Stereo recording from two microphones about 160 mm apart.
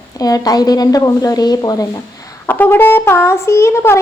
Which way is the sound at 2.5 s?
10° left (ahead or behind).